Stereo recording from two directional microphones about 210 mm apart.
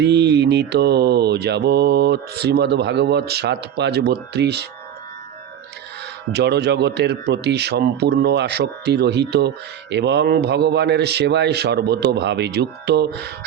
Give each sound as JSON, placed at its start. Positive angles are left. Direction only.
{"t": 0.0, "sound": "mantra", "side_deg": -55}
{"t": 6.3, "sound": "mantra", "side_deg": -55}